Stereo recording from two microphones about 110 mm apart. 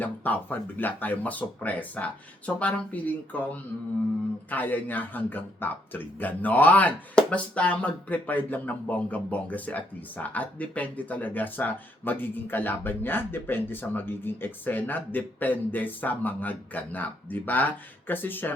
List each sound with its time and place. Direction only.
0.0 s a man's voice: 15° left (ahead or behind)